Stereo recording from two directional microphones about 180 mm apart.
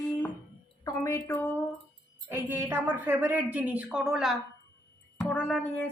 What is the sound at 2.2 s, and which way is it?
A woman's voice, 15° right (ahead or behind).